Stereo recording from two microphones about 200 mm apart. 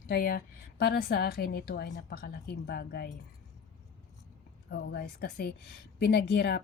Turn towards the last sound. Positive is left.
turn(degrees=55)  # may be behind; listen again after turning